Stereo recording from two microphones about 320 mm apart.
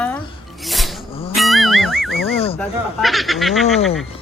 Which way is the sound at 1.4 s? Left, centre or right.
Centre.